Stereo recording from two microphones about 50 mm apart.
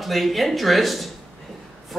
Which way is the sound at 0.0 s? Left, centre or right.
Centre.